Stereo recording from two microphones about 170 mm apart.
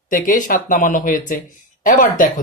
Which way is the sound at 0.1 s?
50° left (ahead or behind).